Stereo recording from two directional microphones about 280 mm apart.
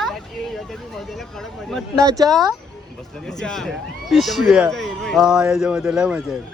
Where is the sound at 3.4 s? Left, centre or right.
Centre.